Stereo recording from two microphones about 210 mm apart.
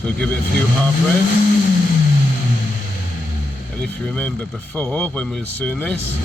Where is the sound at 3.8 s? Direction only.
5° left (ahead or behind).